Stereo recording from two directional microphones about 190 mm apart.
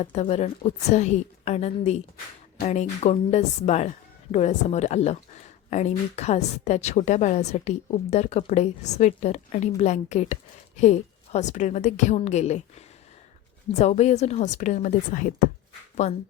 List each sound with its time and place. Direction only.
0.0 s a woman's voice: 35° left (ahead or behind)